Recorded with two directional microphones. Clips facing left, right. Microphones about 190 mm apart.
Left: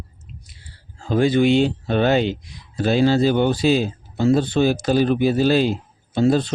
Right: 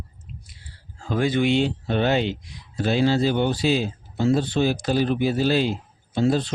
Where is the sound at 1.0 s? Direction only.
30° left (ahead or behind).